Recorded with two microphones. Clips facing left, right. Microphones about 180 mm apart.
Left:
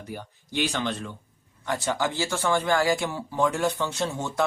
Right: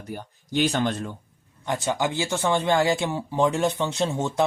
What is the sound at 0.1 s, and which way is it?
Speech, 45° right (ahead or behind).